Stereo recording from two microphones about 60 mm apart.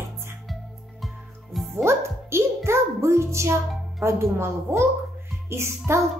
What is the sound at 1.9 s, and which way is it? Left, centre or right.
A child's voice, right.